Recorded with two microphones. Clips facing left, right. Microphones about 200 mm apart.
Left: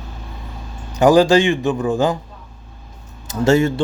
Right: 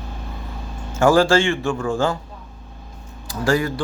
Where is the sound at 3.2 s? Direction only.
25° left (ahead or behind).